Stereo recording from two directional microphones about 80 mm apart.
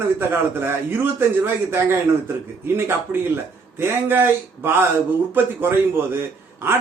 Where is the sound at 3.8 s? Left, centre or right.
Right.